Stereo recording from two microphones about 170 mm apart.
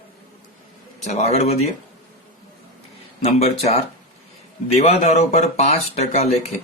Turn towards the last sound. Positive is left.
turn(degrees=40)  # may be behind; listen again after turning